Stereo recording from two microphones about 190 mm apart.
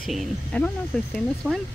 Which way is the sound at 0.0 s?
Centre (ahead or behind).